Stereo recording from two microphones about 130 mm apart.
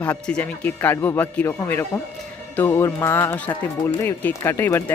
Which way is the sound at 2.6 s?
15° left (ahead or behind).